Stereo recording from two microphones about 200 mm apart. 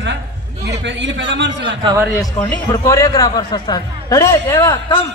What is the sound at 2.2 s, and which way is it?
A man's voice, 5° left (ahead or behind).